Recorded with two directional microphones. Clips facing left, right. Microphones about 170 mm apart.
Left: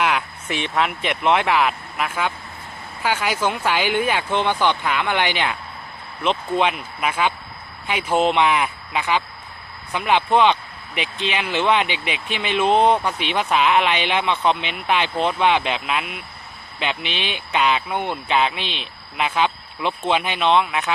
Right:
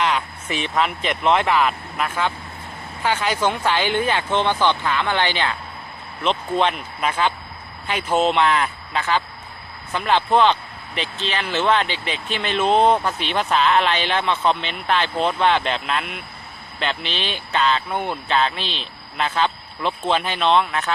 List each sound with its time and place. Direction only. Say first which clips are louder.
0.7 s speech: right 1 dB; 5° left (ahead or behind)
17.9 s speech: even; centre (ahead or behind)
18.3 s speech: left 1 dB; 10° left (ahead or behind)